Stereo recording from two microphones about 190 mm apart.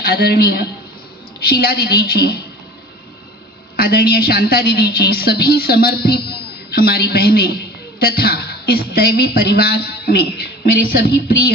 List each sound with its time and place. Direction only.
0.0 s a man's voice: 55° left (ahead or behind)
3.7 s a woman's voice: 50° left (ahead or behind)